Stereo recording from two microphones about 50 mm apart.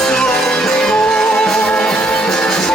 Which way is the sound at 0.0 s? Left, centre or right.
Centre.